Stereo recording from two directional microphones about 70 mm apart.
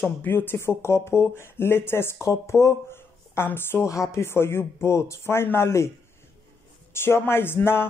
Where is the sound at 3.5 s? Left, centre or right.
Left.